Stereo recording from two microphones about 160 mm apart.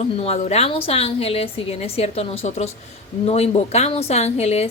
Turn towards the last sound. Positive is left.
turn(degrees=40)  # may be behind; listen again after turning